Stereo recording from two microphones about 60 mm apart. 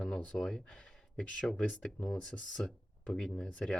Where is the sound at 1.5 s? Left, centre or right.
Left.